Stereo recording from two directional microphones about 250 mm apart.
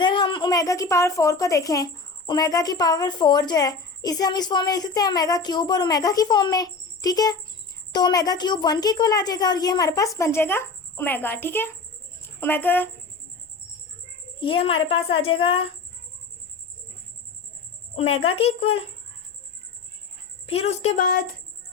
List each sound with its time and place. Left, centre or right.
0.0 s a woman's voice: centre
14.4 s a woman's voice: left
17.9 s a woman's voice: left
20.5 s a woman's voice: left